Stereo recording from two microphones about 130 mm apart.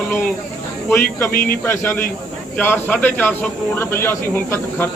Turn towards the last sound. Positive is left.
turn(degrees=15)  # may be behind; listen again after turning